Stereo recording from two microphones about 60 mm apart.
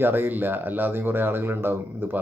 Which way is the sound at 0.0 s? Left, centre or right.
Right.